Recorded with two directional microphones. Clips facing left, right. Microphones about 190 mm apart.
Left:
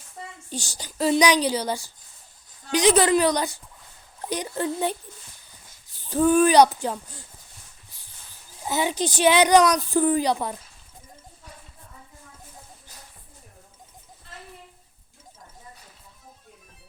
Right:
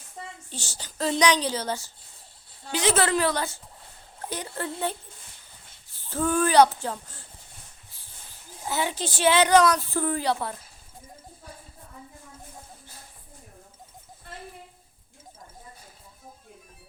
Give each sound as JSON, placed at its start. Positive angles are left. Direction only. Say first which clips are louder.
{"t": 0.5, "sound": "speech", "louder": "left 10 dB", "side_deg": 15}
{"t": 5.9, "sound": "speech", "louder": "left 7 dB", "side_deg": 15}
{"t": 8.6, "sound": "speech", "louder": "left 4 dB", "side_deg": 15}